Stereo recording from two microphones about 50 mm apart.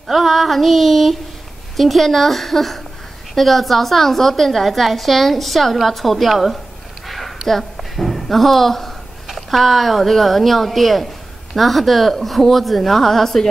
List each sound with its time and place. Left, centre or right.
0.1 s speech: centre
7.1 s a sound: centre
9.3 s speech: centre